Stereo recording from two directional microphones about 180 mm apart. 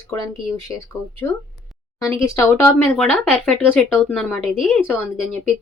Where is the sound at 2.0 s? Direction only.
15° left (ahead or behind).